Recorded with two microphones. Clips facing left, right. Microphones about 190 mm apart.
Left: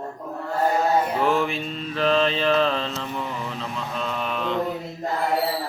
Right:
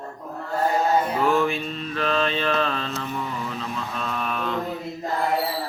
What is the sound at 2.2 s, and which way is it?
Speech, 25° left (ahead or behind).